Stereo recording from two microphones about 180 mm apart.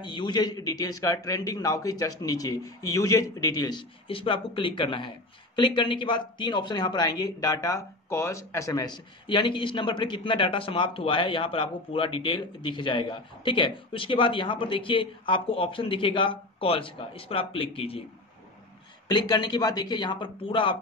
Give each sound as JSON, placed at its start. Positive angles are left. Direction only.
{"t": 0.0, "sound": "speech", "side_deg": 25}
{"t": 19.0, "sound": "speech", "side_deg": 25}